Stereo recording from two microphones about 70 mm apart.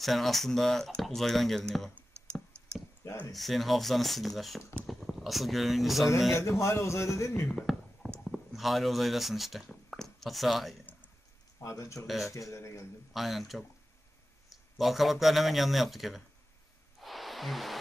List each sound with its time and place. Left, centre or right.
0.0 s speech: centre
3.3 s speech: centre
6.3 s a man's voice: left
7.7 s a sound: centre
8.2 s speech: centre
11.6 s a man's voice: left
12.1 s speech: centre
12.4 s a man's voice: left
13.1 s speech: centre
17.0 s a sound: centre